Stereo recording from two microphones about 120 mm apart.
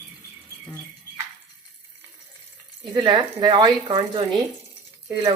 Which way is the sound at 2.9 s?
40° right (ahead or behind).